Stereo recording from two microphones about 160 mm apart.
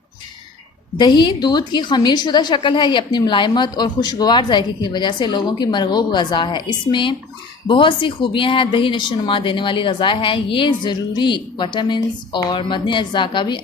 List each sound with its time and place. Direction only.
0.9 s a woman's voice: 30° left (ahead or behind)